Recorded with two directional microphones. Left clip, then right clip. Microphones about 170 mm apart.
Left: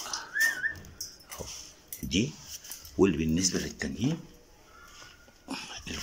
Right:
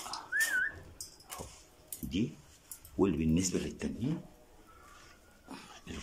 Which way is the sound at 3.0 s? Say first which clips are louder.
Left 5 dB; 5° right (ahead or behind).